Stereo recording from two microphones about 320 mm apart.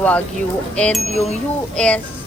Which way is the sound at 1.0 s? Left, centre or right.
Centre.